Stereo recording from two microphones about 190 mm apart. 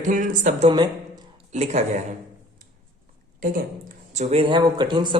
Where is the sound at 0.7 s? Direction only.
20° right (ahead or behind).